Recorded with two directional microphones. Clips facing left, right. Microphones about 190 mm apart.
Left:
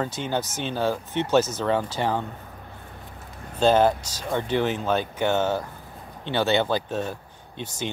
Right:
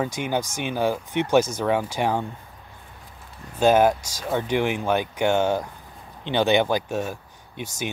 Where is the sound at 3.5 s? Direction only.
10° right (ahead or behind).